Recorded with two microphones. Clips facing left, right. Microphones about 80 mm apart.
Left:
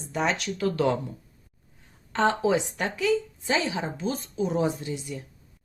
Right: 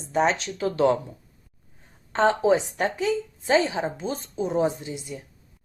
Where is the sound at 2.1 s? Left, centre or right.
Right.